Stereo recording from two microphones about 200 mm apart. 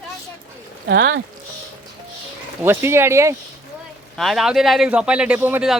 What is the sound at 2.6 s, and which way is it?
Speech, 10° right (ahead or behind).